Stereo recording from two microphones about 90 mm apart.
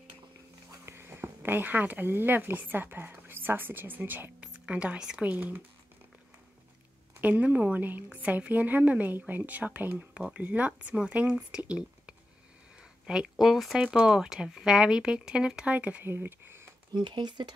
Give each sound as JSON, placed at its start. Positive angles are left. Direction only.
{"t": 0.7, "sound": "speech", "side_deg": -25}
{"t": 7.2, "sound": "speech", "side_deg": -15}
{"t": 16.9, "sound": "speech", "side_deg": -55}